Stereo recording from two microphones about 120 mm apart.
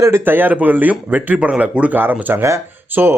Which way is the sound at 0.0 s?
20° right (ahead or behind).